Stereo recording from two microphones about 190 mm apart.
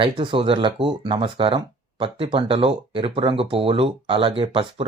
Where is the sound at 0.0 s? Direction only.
30° right (ahead or behind).